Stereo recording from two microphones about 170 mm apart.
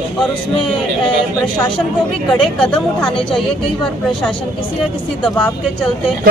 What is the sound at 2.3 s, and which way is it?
Speech, 5° left (ahead or behind).